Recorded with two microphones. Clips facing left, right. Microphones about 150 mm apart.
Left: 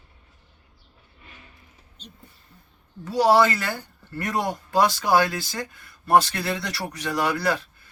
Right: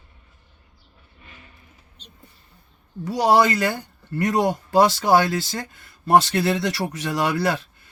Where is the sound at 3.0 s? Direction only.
15° right (ahead or behind).